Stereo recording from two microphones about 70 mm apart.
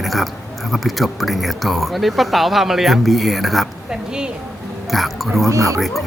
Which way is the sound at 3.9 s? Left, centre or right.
Centre.